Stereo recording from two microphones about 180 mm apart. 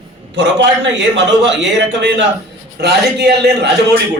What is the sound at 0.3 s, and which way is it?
Speech, 80° right.